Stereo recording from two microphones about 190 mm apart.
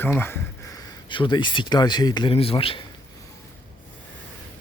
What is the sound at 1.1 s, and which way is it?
Speech, 25° left (ahead or behind).